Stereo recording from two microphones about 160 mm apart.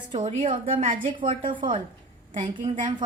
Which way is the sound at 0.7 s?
55° right (ahead or behind).